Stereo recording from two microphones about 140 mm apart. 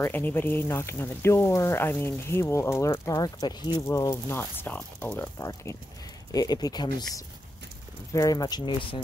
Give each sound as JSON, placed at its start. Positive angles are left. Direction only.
{"t": 0.0, "sound": "speech", "side_deg": 15}
{"t": 8.1, "sound": "speech", "side_deg": 25}